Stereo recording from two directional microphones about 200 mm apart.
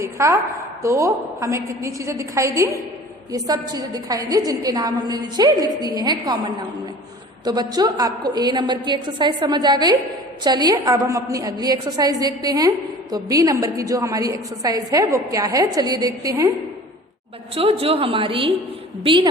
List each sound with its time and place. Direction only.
0.0 s a woman's voice: 15° right (ahead or behind)
17.5 s a woman's voice: 30° right (ahead or behind)